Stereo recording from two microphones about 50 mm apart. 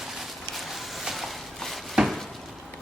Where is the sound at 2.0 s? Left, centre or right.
Centre.